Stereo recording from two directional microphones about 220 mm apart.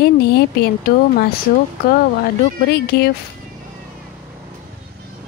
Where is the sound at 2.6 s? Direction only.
45° left (ahead or behind).